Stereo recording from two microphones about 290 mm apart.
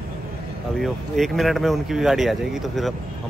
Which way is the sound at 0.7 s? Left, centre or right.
Centre.